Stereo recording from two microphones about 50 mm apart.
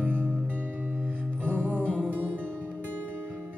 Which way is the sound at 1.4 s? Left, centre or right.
Right.